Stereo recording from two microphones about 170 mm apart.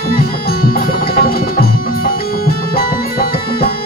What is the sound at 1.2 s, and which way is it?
Music, 60° left (ahead or behind).